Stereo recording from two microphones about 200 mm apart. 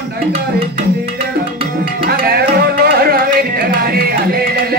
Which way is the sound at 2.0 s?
50° right (ahead or behind).